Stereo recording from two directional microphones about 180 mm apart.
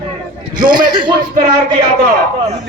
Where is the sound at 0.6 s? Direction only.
25° right (ahead or behind).